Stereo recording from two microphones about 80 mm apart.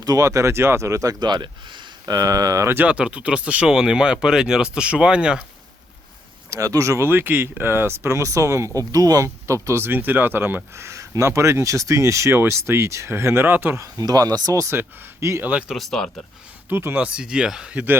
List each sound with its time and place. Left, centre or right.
0.0 s speech: right
1.2 s speech: right
2.1 s speech: right
2.8 s speech: centre
6.5 s speech: right
13.8 s speech: right
15.4 s speech: centre
15.7 s speech: centre
16.6 s speech: right
17.1 s speech: centre